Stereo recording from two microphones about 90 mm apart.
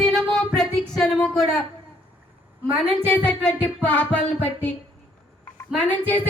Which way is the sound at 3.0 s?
15° left (ahead or behind).